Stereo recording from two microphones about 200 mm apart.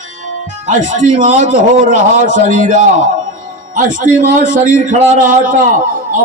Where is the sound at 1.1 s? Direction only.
35° right (ahead or behind).